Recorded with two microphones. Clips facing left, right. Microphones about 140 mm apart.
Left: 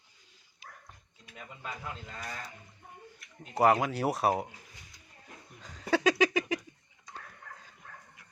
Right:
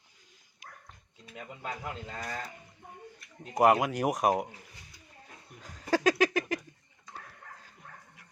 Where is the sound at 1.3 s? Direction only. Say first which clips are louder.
Right 3 dB; 50° right (ahead or behind).